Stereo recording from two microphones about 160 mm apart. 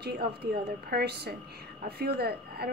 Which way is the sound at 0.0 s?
85° right.